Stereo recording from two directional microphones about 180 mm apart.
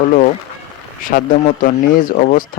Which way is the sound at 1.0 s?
50° left (ahead or behind).